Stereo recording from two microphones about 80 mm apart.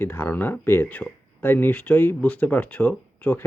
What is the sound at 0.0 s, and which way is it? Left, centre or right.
Speech, left.